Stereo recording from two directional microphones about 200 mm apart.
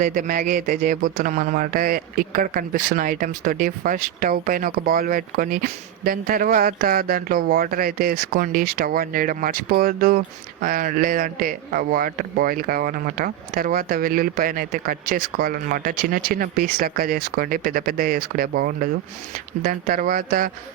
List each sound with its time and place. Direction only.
0.0 s speech: 40° right (ahead or behind)